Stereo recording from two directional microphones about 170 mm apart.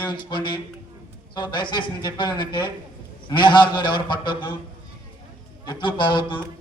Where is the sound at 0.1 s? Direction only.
25° left (ahead or behind).